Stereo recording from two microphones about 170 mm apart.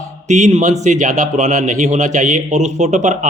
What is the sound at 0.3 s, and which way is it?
A man's voice, 45° right (ahead or behind).